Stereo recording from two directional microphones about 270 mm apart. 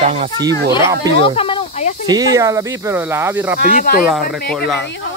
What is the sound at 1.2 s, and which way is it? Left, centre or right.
Snake, centre.